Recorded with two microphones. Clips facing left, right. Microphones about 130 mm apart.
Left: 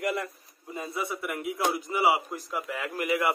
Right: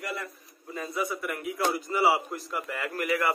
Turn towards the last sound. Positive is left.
turn(degrees=10)  # may be behind; listen again after turning